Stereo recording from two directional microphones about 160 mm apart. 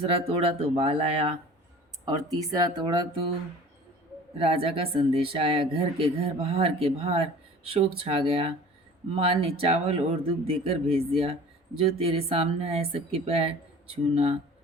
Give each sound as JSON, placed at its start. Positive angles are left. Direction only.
{"t": 0.0, "sound": "speech", "side_deg": -35}
{"t": 2.0, "sound": "speech", "side_deg": -25}
{"t": 4.4, "sound": "speech", "side_deg": -35}